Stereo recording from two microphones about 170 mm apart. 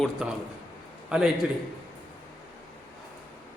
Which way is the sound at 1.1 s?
Centre (ahead or behind).